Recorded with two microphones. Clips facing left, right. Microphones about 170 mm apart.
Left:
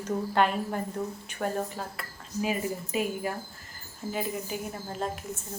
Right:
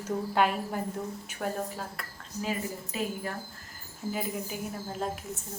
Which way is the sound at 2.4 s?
15° left (ahead or behind).